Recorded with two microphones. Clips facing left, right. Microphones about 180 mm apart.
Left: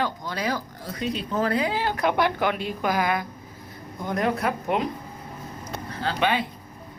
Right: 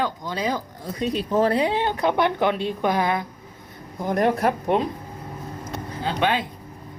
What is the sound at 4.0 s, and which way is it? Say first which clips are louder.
Speech: right 4 dB; 35° right (ahead or behind).